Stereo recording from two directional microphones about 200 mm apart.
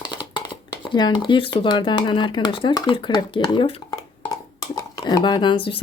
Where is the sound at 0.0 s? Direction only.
20° left (ahead or behind).